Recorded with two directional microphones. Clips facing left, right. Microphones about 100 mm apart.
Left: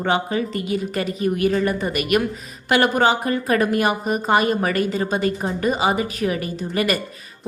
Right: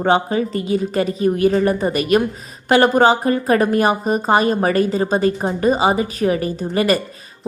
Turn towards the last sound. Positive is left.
turn(degrees=-30)  # may be behind; listen again after turning